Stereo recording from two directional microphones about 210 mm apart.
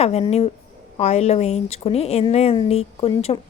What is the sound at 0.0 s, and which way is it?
A woman's voice, 30° left (ahead or behind).